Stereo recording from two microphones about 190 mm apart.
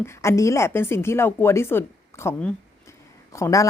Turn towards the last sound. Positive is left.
turn(degrees=15)  # may be behind; listen again after turning